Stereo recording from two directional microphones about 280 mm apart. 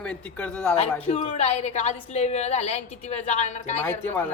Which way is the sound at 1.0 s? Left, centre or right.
Left.